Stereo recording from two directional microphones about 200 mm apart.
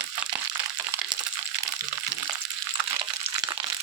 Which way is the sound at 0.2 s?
10° right (ahead or behind).